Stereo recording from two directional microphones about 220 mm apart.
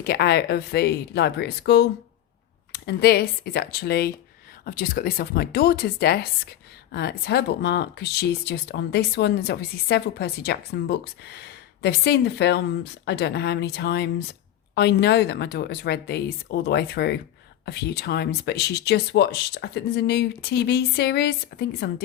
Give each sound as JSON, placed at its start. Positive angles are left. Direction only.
{"t": 0.0, "sound": "speech", "side_deg": 45}